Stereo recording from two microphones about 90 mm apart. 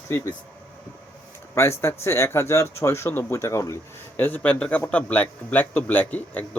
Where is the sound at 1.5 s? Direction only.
30° left (ahead or behind).